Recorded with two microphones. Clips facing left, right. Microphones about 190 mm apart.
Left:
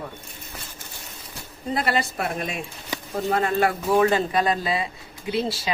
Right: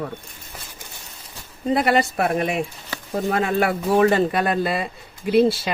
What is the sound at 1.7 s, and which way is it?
Speech, 60° right (ahead or behind).